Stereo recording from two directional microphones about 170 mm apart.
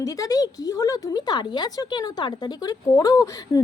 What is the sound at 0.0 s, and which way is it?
Speech, 20° left (ahead or behind).